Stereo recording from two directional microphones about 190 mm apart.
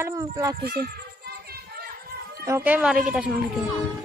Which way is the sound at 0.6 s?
55° right (ahead or behind).